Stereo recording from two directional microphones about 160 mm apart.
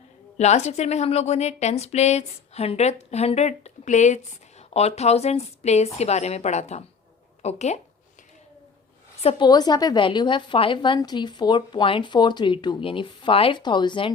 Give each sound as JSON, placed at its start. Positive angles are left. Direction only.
{"t": 0.3, "sound": "a woman's voice", "side_deg": 45}
{"t": 9.2, "sound": "a woman's voice", "side_deg": 25}